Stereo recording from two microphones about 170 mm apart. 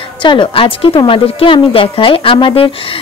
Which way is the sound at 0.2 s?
30° left (ahead or behind).